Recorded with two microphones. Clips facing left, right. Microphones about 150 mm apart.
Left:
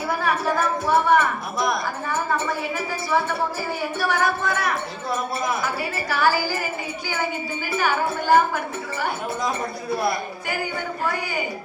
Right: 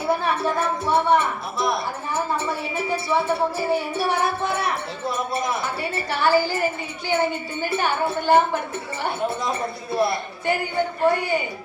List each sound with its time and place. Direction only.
0.1 s a woman's voice: 25° right (ahead or behind)
7.8 s a woman's voice: 25° right (ahead or behind)
9.9 s a woman's voice: 25° right (ahead or behind)